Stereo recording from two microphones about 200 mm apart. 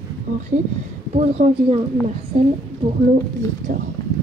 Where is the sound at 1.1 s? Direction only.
30° right (ahead or behind).